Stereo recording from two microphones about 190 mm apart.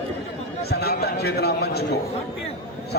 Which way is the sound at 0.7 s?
55° left (ahead or behind).